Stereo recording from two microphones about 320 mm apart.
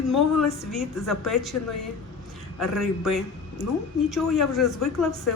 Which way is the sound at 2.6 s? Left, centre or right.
Centre.